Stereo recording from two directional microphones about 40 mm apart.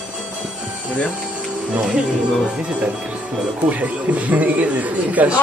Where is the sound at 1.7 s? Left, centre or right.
Right.